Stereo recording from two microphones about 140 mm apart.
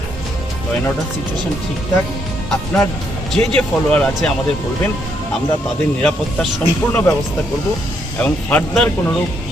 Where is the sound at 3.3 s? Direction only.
5° left (ahead or behind).